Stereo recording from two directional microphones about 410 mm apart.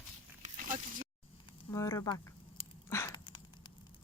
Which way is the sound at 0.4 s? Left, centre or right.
Centre.